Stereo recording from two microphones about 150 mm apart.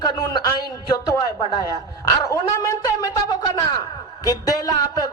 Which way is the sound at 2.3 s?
20° left (ahead or behind).